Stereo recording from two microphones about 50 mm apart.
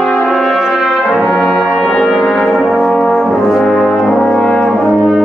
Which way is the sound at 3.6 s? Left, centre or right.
Centre.